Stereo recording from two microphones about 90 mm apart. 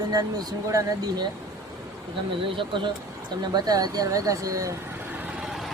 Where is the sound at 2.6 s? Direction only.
65° right (ahead or behind).